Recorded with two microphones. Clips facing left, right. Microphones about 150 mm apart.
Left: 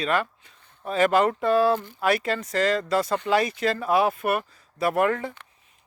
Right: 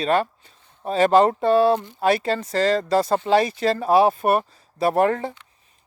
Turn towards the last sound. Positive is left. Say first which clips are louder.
# right 3 dB
turn(degrees=-30)  # may be behind; listen again after turning